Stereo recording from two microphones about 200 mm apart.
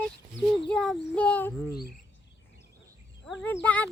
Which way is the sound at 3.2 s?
5° left (ahead or behind).